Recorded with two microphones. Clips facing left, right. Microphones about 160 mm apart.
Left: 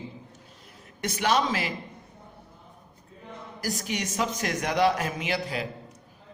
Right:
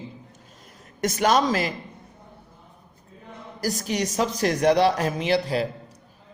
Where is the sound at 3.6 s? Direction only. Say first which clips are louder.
Right 5 dB; 35° right (ahead or behind).